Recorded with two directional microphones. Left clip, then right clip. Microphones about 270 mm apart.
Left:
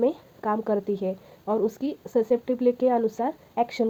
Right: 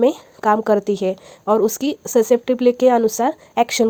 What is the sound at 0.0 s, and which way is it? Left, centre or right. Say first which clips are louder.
Speech: right 9 dB; right.